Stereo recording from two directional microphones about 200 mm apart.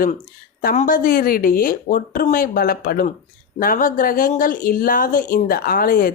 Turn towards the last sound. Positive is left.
turn(degrees=45)  # may be behind; listen again after turning